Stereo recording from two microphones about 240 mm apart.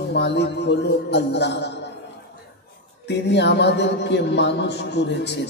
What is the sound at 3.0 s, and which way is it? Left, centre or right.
A man's voice, left.